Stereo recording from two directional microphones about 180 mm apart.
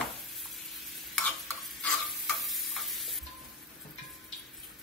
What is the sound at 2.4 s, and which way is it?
Frying, centre (ahead or behind).